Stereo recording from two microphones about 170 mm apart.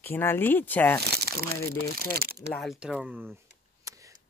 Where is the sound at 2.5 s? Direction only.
Centre (ahead or behind).